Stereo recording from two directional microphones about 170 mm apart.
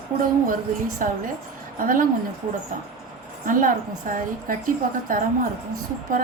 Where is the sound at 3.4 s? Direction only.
50° right (ahead or behind).